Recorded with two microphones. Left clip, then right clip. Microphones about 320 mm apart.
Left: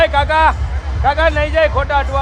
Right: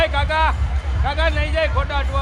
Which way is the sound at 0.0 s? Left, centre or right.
Left.